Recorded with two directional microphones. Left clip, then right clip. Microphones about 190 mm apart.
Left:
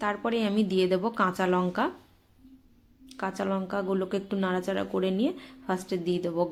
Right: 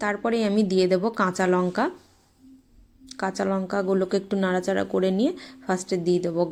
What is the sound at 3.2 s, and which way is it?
A woman's voice, 20° right (ahead or behind).